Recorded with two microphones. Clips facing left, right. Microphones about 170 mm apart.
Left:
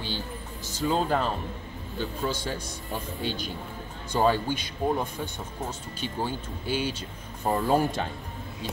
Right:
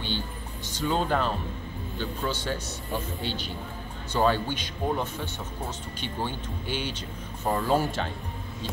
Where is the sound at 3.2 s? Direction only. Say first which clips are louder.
Left 1 dB; 45° left (ahead or behind).